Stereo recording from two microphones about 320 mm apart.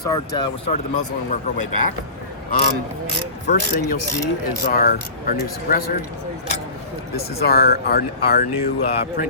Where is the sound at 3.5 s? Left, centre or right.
Left.